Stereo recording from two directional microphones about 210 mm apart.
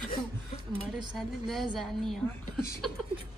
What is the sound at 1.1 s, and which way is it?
Speech, centre (ahead or behind).